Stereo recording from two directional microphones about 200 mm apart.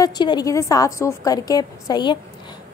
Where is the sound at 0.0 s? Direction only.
20° left (ahead or behind).